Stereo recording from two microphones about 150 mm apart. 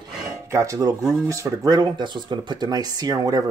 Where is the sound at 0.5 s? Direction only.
20° right (ahead or behind).